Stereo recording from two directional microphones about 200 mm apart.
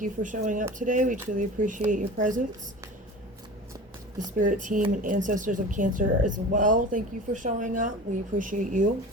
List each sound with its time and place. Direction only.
0.0 s speech: 40° right (ahead or behind)
4.4 s speech: 40° right (ahead or behind)